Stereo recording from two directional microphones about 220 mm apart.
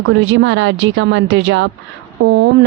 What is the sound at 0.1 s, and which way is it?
A woman's voice, 60° right (ahead or behind).